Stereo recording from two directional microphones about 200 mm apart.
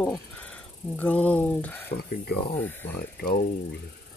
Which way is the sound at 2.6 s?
10° left (ahead or behind).